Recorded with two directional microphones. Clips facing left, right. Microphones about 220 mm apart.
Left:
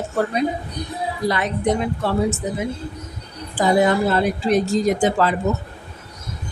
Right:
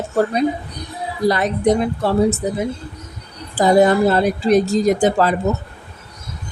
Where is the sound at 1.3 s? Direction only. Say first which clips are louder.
Right 5 dB; 40° right (ahead or behind).